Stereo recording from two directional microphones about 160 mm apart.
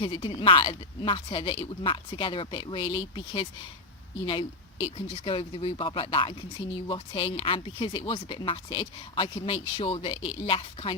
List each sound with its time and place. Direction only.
0.0 s speech: 35° left (ahead or behind)
4.9 s speech: 35° left (ahead or behind)